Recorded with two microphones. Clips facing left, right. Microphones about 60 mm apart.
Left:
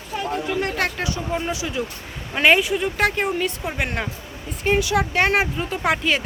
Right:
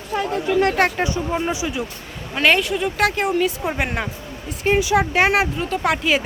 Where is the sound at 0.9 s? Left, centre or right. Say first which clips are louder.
Right 3 dB; right.